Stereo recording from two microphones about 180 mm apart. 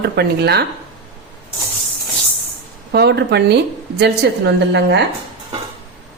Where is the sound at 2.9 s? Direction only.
70° right (ahead or behind).